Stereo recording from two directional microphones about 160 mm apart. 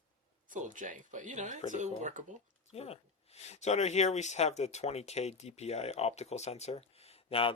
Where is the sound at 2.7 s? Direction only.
40° left (ahead or behind).